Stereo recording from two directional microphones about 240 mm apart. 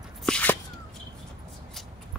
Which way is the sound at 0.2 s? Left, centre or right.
Centre.